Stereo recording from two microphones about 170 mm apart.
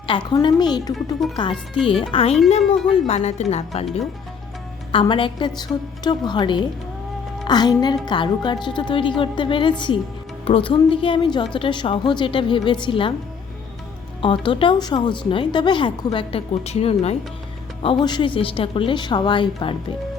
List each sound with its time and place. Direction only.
0.1 s a woman's voice: 25° left (ahead or behind)
1.2 s speech: centre (ahead or behind)
1.9 s a woman's voice: 30° left (ahead or behind)
4.9 s a woman's voice: 30° left (ahead or behind)
14.2 s a woman's voice: 30° left (ahead or behind)
17.8 s a woman's voice: 30° left (ahead or behind)